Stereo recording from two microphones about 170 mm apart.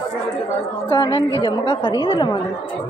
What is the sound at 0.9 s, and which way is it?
A woman's voice, 30° left (ahead or behind).